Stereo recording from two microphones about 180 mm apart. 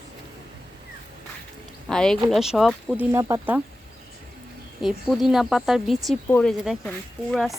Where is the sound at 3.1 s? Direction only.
15° right (ahead or behind).